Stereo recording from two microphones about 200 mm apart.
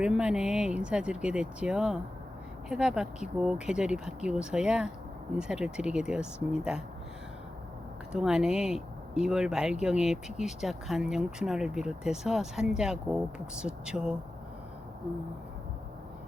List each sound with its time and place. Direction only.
0.0 s speech: 5° right (ahead or behind)
8.1 s speech: 5° right (ahead or behind)